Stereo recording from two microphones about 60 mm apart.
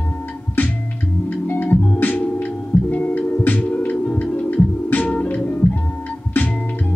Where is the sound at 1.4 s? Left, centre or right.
Left.